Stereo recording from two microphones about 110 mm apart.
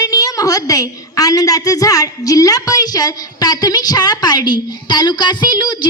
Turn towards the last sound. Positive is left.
turn(degrees=45)  # may be behind; listen again after turning